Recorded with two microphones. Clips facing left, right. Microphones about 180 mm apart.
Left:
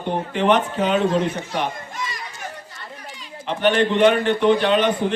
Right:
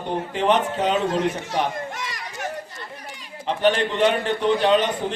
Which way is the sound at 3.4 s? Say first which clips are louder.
Left 2 dB; 35° right (ahead or behind).